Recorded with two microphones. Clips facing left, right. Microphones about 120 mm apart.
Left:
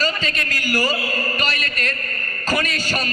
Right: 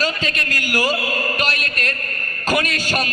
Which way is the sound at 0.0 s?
60° right (ahead or behind).